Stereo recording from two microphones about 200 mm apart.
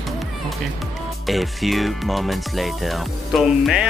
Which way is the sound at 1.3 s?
Centre (ahead or behind).